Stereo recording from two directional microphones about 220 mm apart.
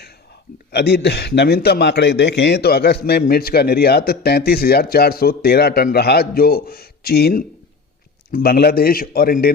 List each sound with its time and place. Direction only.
0.7 s a man's voice: 50° left (ahead or behind)